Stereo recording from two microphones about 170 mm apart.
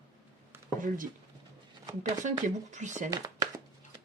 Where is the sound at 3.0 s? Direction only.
20° right (ahead or behind).